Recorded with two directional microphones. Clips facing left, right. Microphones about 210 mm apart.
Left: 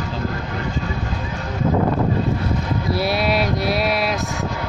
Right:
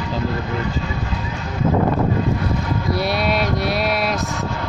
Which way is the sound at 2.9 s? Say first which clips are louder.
Left 1 dB; centre (ahead or behind).